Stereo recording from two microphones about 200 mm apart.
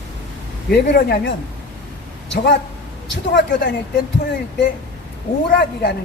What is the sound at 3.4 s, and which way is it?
Speech, 60° left (ahead or behind).